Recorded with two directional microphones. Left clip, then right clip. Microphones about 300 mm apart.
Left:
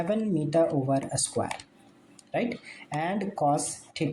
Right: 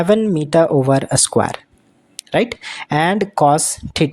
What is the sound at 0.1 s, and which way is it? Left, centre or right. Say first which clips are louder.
Speech: right 13 dB; right.